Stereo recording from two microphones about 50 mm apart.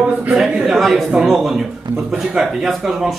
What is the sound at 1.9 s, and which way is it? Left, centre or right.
Speech, right.